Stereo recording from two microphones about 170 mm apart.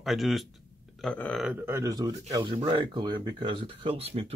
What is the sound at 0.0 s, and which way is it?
Speech, centre (ahead or behind).